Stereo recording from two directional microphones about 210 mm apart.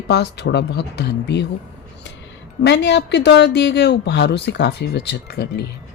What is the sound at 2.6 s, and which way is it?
Speech, 55° left (ahead or behind).